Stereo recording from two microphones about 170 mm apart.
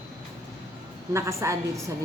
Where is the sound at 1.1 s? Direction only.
15° right (ahead or behind).